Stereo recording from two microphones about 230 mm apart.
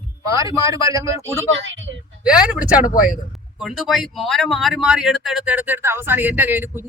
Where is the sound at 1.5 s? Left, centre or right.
Right.